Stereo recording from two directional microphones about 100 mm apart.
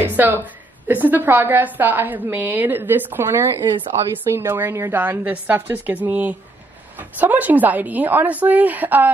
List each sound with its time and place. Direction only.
0.0 s a woman's voice: 20° right (ahead or behind)